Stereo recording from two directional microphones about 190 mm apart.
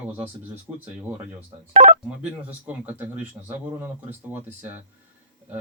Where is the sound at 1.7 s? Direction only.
40° right (ahead or behind).